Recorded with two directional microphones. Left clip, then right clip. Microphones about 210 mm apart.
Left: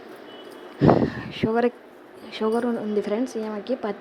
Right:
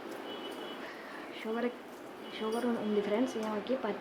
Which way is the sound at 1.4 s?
35° left (ahead or behind).